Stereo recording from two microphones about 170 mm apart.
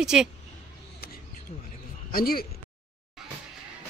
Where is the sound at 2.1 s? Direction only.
60° left (ahead or behind).